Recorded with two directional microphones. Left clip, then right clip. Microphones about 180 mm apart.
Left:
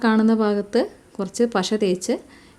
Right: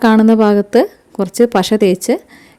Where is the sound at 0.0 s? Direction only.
45° right (ahead or behind).